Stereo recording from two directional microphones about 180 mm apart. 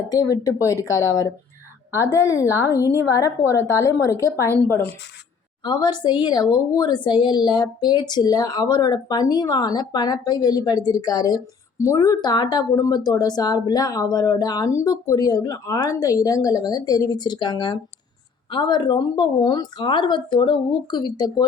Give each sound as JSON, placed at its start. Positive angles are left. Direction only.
{"t": 0.1, "sound": "a woman's voice", "side_deg": 20}
{"t": 5.6, "sound": "a woman's voice", "side_deg": 25}